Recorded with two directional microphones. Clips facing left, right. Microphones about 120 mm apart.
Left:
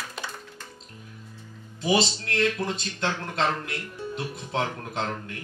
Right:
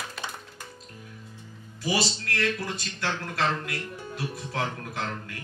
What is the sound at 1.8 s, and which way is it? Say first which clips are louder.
A man's voice: left 4 dB; 25° left (ahead or behind).